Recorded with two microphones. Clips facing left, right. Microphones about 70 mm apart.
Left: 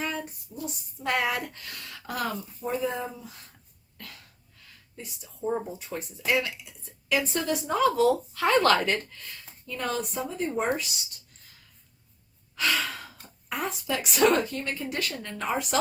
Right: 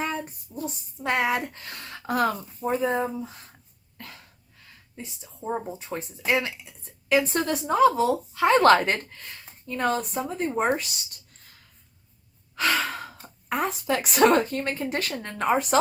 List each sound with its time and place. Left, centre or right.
1.0 s speech: right
4.9 s speech: right
7.8 s speech: right
8.5 s speech: right
12.5 s sigh: right
13.5 s speech: right